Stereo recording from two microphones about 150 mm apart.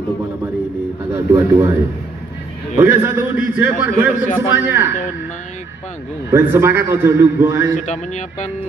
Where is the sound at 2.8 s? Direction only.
15° right (ahead or behind).